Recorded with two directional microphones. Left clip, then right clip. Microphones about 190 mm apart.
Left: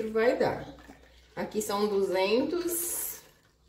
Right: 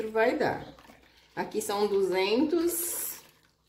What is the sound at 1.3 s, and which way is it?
A woman's voice, 35° right (ahead or behind).